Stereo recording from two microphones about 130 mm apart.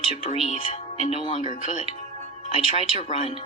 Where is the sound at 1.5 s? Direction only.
45° right (ahead or behind).